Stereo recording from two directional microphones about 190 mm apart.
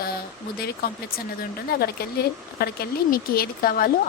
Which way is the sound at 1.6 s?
55° left (ahead or behind).